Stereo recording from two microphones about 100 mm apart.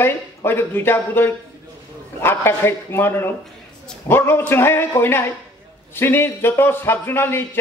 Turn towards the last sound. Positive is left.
turn(degrees=20)  # may be behind; listen again after turning